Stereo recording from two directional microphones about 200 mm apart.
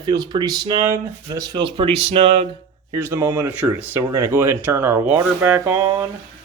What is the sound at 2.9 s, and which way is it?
Speech, 10° right (ahead or behind).